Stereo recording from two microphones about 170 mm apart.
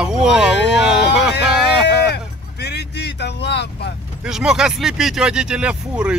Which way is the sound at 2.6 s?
80° left.